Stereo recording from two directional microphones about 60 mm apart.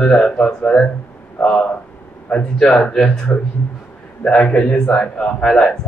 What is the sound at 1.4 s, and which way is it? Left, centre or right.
Speech, left.